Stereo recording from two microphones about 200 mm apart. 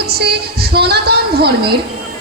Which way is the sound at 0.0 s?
50° right (ahead or behind).